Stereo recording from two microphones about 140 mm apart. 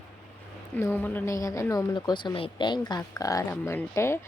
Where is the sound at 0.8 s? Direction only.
15° left (ahead or behind).